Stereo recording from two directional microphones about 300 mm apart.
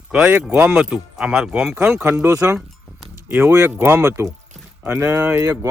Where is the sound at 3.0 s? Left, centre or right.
Centre.